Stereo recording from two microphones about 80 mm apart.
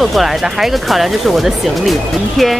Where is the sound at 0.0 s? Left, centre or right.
Centre.